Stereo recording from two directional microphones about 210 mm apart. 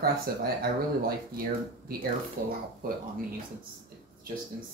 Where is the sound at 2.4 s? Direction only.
40° right (ahead or behind).